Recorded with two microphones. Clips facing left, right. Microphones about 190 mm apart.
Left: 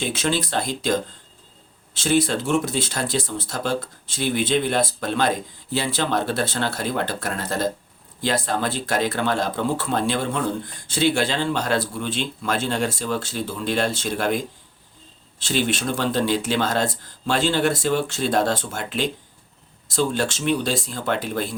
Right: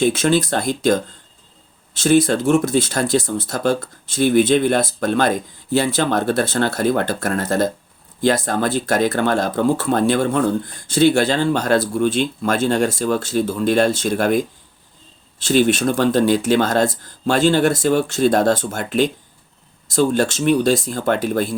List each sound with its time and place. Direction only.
0.0 s speech: 45° right (ahead or behind)
2.0 s speech: 45° right (ahead or behind)